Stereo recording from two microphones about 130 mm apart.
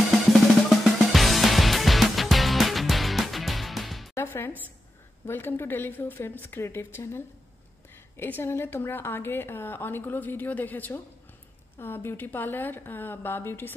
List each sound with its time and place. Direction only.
0.3 s music: centre (ahead or behind)
4.1 s music: 20° left (ahead or behind)
5.2 s a woman's voice: 15° left (ahead or behind)